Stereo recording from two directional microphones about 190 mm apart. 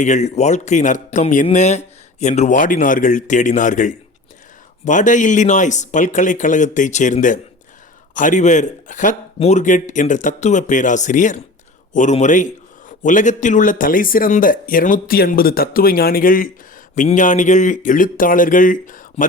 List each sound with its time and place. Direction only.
0.0 s speech: 35° left (ahead or behind)